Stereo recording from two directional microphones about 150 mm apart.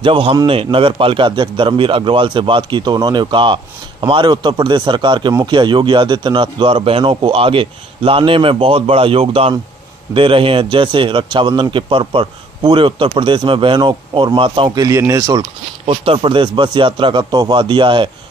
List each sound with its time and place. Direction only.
0.0 s a man's voice: 35° right (ahead or behind)
14.9 s speech: 20° right (ahead or behind)
15.9 s a man's voice: 35° right (ahead or behind)